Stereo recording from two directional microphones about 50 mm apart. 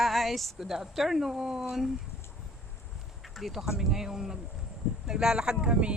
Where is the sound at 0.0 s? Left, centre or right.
Centre.